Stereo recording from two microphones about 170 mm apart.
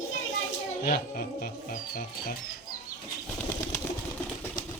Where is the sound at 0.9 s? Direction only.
55° left (ahead or behind).